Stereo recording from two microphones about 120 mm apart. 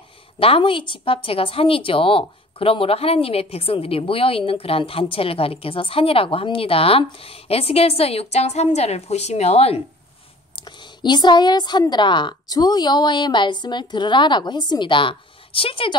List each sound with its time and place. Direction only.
0.4 s a woman's voice: 50° left (ahead or behind)
10.5 s a woman's voice: 40° left (ahead or behind)